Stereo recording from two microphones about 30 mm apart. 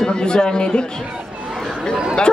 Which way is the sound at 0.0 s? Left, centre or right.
Left.